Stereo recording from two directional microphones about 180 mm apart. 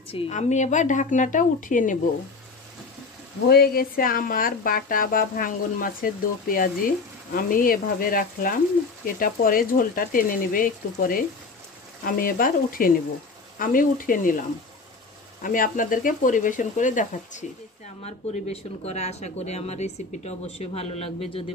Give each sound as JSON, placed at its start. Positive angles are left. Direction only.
{"t": 0.1, "sound": "speech", "side_deg": 40}
{"t": 3.4, "sound": "speech", "side_deg": 60}
{"t": 15.4, "sound": "speech", "side_deg": 50}